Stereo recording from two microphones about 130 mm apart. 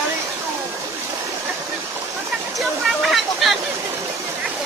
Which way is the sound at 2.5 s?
Centre (ahead or behind).